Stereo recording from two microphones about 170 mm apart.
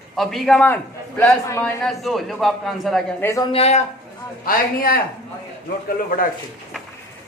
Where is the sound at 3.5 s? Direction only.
35° left (ahead or behind).